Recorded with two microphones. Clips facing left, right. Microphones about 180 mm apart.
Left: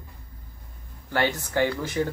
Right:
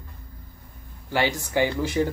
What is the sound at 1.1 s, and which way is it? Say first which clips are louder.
Speech: right 1 dB; 15° right (ahead or behind).